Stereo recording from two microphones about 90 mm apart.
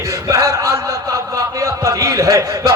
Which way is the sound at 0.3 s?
35° right (ahead or behind).